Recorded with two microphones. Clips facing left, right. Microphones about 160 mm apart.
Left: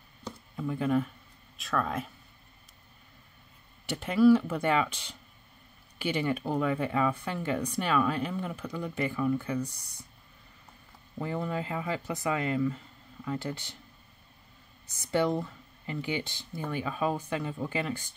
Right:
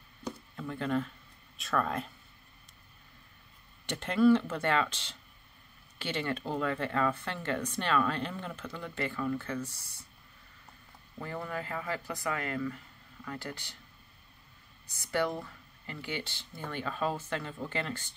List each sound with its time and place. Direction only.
0.6 s speech: 10° left (ahead or behind)
1.6 s speech: centre (ahead or behind)
3.8 s speech: 5° left (ahead or behind)
11.1 s speech: 20° left (ahead or behind)
15.0 s speech: 20° left (ahead or behind)